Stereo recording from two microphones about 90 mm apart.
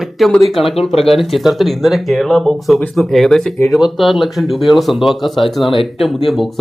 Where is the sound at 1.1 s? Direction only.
Centre (ahead or behind).